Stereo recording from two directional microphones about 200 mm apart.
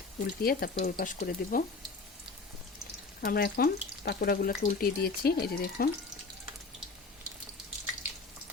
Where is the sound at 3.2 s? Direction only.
50° left (ahead or behind).